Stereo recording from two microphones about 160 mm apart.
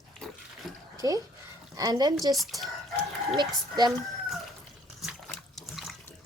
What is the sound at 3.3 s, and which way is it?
Speech, 25° right (ahead or behind).